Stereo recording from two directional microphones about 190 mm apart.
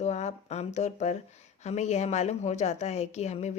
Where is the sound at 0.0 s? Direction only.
35° left (ahead or behind).